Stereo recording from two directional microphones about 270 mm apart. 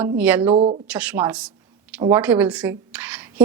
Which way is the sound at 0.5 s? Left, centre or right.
Right.